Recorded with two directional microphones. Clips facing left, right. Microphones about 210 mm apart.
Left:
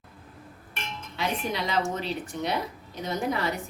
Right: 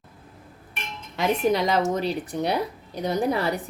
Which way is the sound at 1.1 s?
45° right (ahead or behind).